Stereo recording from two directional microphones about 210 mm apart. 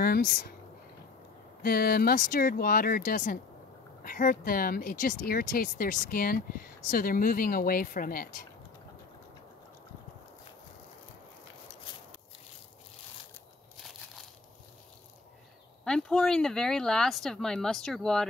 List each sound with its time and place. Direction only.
0.0 s speech: 45° left (ahead or behind)
1.6 s speech: 45° left (ahead or behind)
15.8 s speech: 5° left (ahead or behind)